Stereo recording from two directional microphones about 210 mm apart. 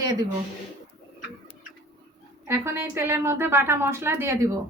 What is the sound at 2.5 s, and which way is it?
A woman's voice, 10° right (ahead or behind).